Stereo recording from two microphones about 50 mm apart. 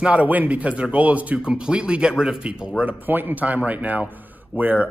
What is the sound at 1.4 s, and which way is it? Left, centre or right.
A man's voice, centre.